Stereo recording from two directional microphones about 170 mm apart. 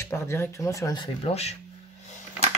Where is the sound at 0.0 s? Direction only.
15° left (ahead or behind); by 1.6 s 40° left (ahead or behind).